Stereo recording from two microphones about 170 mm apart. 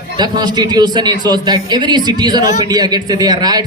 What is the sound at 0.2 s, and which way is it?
A man's voice, 25° right (ahead or behind).